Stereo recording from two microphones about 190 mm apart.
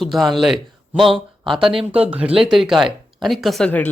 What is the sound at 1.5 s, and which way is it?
Speech, 25° right (ahead or behind).